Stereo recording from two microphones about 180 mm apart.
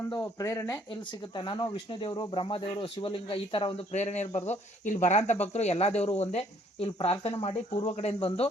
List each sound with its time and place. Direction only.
0.1 s speech: 20° left (ahead or behind); by 8.4 s 35° left (ahead or behind)